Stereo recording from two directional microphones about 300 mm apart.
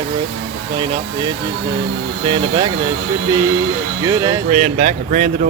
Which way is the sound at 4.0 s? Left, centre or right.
Centre.